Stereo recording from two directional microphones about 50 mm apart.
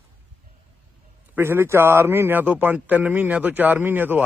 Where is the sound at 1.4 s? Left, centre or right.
Right.